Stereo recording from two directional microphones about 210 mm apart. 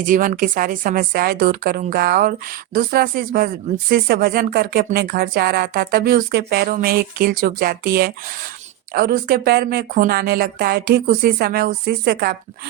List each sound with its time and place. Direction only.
0.0 s speech: 40° right (ahead or behind)